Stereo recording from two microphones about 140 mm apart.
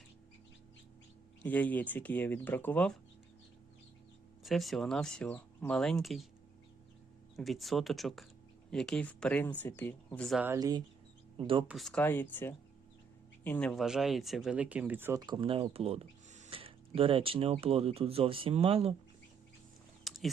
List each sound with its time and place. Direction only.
1.5 s speech: 10° left (ahead or behind)
4.4 s speech: centre (ahead or behind)
7.3 s speech: centre (ahead or behind)
10.2 s speech: centre (ahead or behind)
10.4 s speech: 25° right (ahead or behind)
11.3 s speech: 40° right (ahead or behind)
11.7 s speech: centre (ahead or behind)
13.8 s speech: 5° right (ahead or behind)
15.2 s speech: 35° right (ahead or behind); by 16.5 s 50° right (ahead or behind)
16.5 s speech: 40° right (ahead or behind)
20.1 s typing: centre (ahead or behind)